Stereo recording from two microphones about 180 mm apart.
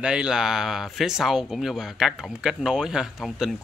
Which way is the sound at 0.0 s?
5° right (ahead or behind).